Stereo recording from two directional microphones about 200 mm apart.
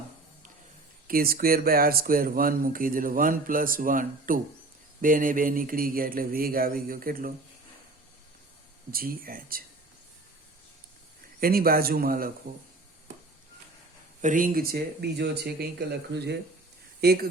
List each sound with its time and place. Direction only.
1.0 s speech: 45° right (ahead or behind)
8.9 s speech: 45° right (ahead or behind)
11.3 s speech: 45° right (ahead or behind)
14.2 s speech: 40° right (ahead or behind)